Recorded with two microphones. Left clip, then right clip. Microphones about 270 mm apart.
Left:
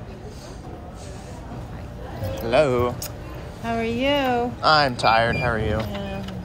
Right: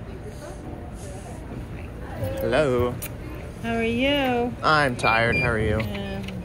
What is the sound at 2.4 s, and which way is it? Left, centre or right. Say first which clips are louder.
Speech: left 2 dB; centre.